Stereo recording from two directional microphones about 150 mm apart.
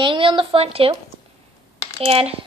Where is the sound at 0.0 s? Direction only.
35° right (ahead or behind).